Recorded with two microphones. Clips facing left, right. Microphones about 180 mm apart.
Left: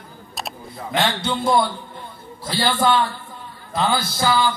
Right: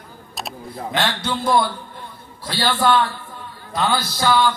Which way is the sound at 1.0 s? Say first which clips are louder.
Left 2 dB; centre (ahead or behind).